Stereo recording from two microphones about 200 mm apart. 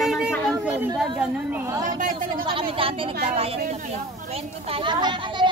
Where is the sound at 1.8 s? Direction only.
45° right (ahead or behind).